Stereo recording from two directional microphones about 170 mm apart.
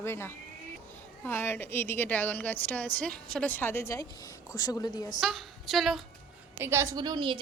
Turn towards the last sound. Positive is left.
turn(degrees=-30)  # may be behind; listen again after turning